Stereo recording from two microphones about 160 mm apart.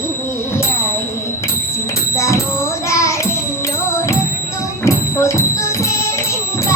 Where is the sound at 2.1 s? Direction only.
20° left (ahead or behind).